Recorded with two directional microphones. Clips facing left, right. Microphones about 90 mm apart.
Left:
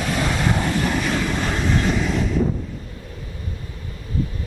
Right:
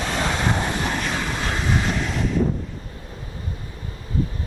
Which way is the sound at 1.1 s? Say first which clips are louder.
Left 3 dB; 5° right (ahead or behind).